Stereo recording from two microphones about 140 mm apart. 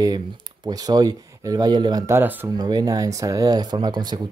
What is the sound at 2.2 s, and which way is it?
Speech, 15° right (ahead or behind).